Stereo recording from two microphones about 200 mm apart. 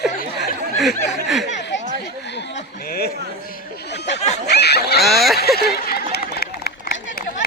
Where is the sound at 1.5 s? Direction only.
60° left (ahead or behind).